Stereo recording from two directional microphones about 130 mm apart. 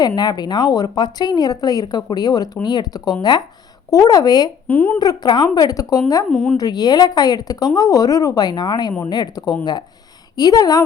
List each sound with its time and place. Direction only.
0.2 s speech: 35° left (ahead or behind)
4.7 s a woman's voice: 15° left (ahead or behind)
4.9 s speech: 35° left (ahead or behind)
6.3 s a woman's voice: 5° left (ahead or behind)
6.6 s speech: 30° left (ahead or behind)